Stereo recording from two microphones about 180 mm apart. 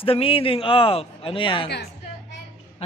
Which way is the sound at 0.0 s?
30° left (ahead or behind).